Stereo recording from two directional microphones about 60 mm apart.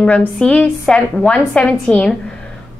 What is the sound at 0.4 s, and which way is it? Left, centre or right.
A woman's voice, centre.